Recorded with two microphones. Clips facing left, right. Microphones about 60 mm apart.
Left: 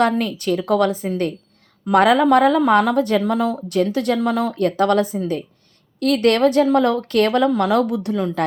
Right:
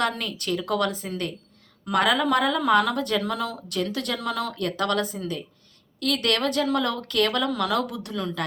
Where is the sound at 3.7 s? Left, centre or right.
Left.